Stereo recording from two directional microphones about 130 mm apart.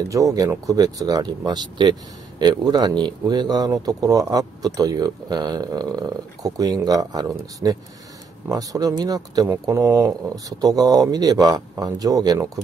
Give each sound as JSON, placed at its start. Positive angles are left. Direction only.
{"t": 0.1, "sound": "speech", "side_deg": -25}